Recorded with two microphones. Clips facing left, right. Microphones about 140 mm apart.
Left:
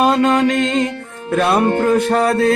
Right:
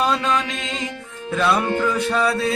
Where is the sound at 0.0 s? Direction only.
55° left (ahead or behind).